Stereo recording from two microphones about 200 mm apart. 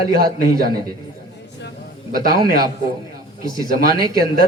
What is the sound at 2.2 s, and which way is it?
Speech, 45° right (ahead or behind).